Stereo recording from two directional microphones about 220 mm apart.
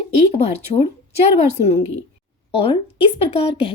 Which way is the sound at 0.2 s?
30° left (ahead or behind).